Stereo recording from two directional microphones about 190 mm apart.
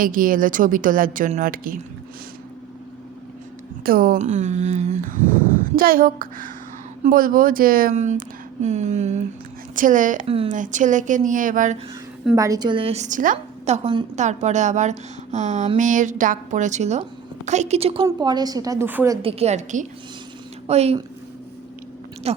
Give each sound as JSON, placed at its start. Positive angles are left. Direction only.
{"t": 0.0, "sound": "a woman's voice", "side_deg": -45}
{"t": 3.8, "sound": "a woman's voice", "side_deg": -50}
{"t": 5.6, "sound": "a woman's voice", "side_deg": -50}
{"t": 10.2, "sound": "a woman's voice", "side_deg": -30}
{"t": 10.5, "sound": "a woman's voice", "side_deg": -40}
{"t": 12.4, "sound": "a woman's voice", "side_deg": -20}
{"t": 19.2, "sound": "a woman's voice", "side_deg": -30}
{"t": 22.3, "sound": "speech", "side_deg": -30}